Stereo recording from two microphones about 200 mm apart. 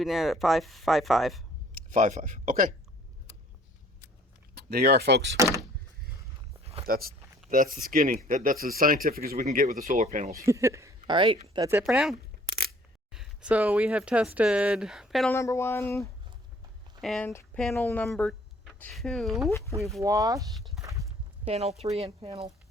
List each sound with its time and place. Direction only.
0.0 s speech: centre (ahead or behind)
1.7 s speech: 40° right (ahead or behind)
4.5 s speech: 50° right (ahead or behind)
6.8 s speech: 45° right (ahead or behind)
10.4 s speech: 15° right (ahead or behind)
11.7 s speech: 5° right (ahead or behind)
15.3 s speech: 15° left (ahead or behind)
19.5 s speech: 15° left (ahead or behind)
20.0 s speech: 15° right (ahead or behind)
20.5 s speech: centre (ahead or behind)
20.8 s clip-clop: 15° right (ahead or behind)
21.4 s speech: 30° right (ahead or behind)